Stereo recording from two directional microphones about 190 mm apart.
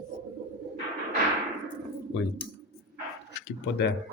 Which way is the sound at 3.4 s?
65° left (ahead or behind).